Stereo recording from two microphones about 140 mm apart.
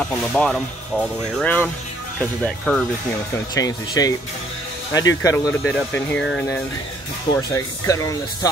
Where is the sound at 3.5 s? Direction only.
25° left (ahead or behind).